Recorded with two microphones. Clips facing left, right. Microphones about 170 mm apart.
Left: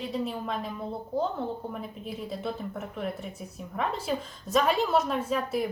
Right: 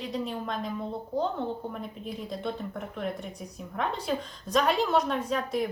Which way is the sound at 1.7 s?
Centre (ahead or behind).